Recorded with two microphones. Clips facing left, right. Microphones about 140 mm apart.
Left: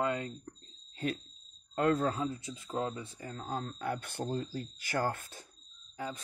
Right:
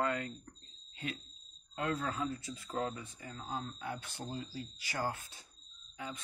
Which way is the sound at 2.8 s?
35° left (ahead or behind).